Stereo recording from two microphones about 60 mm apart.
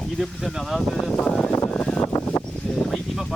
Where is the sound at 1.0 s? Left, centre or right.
Centre.